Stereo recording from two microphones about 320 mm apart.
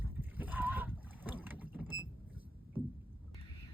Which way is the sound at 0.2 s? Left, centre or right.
Centre.